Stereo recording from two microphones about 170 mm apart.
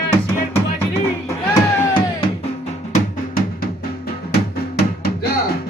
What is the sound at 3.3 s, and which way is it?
Drum, 65° left (ahead or behind).